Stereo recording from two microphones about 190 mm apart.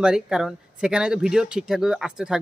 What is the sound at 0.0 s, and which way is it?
Speech, 5° right (ahead or behind).